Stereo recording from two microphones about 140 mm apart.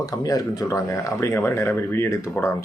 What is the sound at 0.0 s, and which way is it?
Speech, 25° left (ahead or behind).